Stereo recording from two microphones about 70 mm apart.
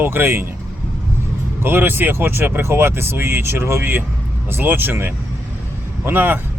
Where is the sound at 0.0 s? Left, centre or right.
Right.